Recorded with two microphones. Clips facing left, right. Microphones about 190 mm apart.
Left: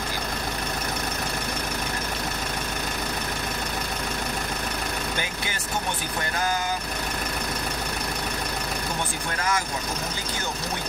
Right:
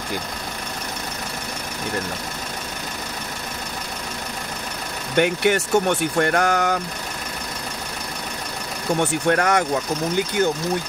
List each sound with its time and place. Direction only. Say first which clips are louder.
5.1 s speech: right 13 dB; 65° right (ahead or behind)
9.0 s speech: right 10 dB; 70° right (ahead or behind)